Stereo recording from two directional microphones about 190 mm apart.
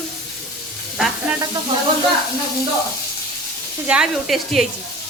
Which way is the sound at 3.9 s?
Centre (ahead or behind).